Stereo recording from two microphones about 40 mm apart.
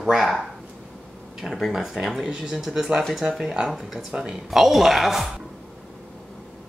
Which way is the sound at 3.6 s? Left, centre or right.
Centre.